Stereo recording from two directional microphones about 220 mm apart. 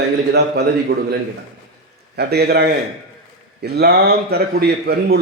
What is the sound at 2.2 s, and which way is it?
A man's voice, 45° right (ahead or behind).